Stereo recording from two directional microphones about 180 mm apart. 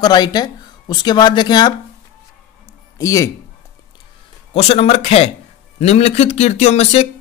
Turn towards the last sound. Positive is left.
turn(degrees=35)  # may be behind; listen again after turning